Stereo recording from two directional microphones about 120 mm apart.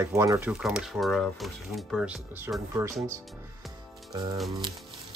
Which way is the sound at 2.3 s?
25° right (ahead or behind).